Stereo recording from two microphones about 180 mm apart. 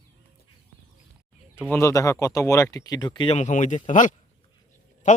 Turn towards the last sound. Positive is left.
turn(degrees=45)  # may be behind; listen again after turning